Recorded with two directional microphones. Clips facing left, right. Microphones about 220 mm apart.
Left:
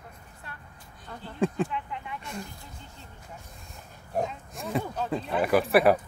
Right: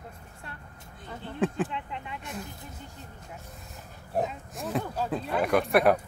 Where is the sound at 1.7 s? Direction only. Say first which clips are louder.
Left 1 dB; 25° right (ahead or behind).